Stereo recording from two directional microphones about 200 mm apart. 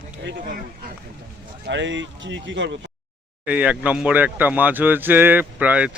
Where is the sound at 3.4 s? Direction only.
5° right (ahead or behind).